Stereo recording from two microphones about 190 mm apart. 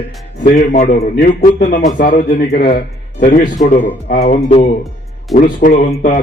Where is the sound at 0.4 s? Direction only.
40° left (ahead or behind).